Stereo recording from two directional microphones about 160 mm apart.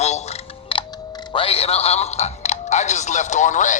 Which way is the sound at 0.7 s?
35° left (ahead or behind).